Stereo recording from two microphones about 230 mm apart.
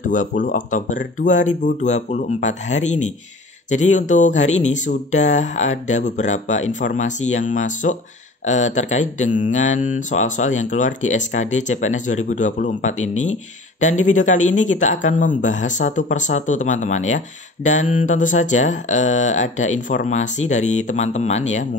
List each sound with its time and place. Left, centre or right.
0.0 s speech: left